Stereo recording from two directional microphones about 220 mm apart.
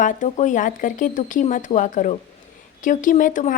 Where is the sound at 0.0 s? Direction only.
35° left (ahead or behind).